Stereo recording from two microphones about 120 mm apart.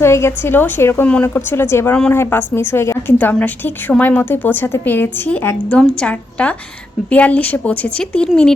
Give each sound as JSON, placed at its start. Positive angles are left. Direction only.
{"t": 0.0, "sound": "a woman's voice", "side_deg": 20}